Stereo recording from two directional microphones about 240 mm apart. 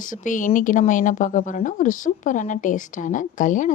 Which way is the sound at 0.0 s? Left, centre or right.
Left.